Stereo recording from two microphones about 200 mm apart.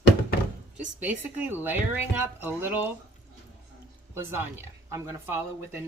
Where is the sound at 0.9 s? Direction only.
10° right (ahead or behind).